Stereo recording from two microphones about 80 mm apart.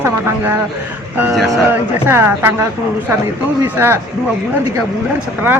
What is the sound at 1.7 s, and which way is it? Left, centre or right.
Speech, right.